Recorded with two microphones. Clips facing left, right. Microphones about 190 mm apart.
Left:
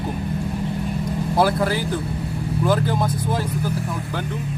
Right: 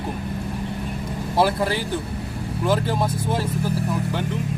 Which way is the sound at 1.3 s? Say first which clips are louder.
Left 1 dB; centre (ahead or behind).